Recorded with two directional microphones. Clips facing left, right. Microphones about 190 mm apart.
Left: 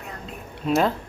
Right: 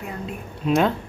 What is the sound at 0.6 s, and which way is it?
Speech, centre (ahead or behind).